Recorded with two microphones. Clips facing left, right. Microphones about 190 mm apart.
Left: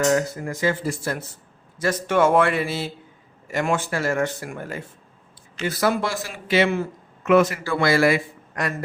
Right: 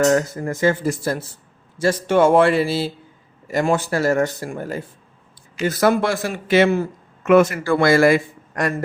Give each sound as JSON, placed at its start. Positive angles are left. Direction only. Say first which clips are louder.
{"t": 0.0, "sound": "a man's voice", "louder": "right 4 dB", "side_deg": -45}
{"t": 1.8, "sound": "speech", "louder": "right 4 dB", "side_deg": -30}
{"t": 5.5, "sound": "a man's voice", "louder": "right 5 dB", "side_deg": -45}